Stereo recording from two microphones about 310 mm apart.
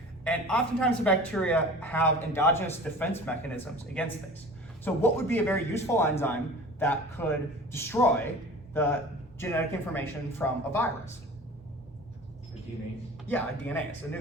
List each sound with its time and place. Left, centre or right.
0.3 s a man's voice: centre
13.2 s speech: centre